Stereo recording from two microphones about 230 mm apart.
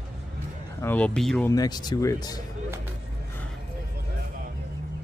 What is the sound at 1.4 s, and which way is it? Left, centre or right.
Speech, centre.